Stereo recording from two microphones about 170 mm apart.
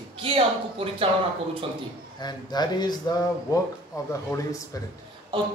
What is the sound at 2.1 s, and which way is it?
Speech, 25° left (ahead or behind).